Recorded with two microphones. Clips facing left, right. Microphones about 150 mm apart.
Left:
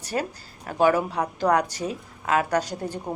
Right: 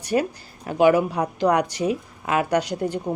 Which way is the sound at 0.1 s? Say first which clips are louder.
Right 6 dB; 20° right (ahead or behind).